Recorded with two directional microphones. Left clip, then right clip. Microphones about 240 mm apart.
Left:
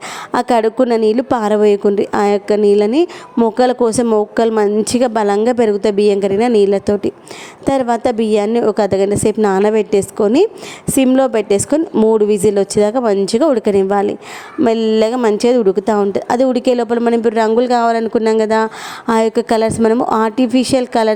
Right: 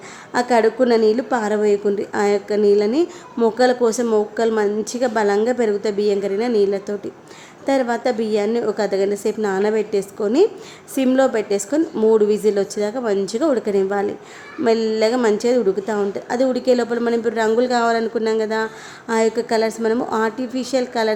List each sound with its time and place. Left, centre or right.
0.3 s a woman's voice: left